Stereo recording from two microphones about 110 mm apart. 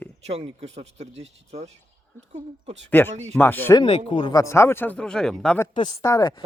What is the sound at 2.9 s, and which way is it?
Speech, 20° left (ahead or behind).